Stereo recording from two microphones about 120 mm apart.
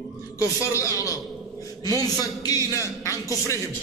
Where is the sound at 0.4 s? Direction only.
30° left (ahead or behind).